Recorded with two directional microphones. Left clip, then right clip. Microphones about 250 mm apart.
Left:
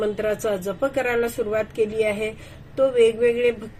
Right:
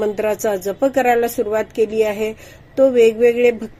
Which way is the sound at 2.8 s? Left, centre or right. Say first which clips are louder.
Right 5 dB; right.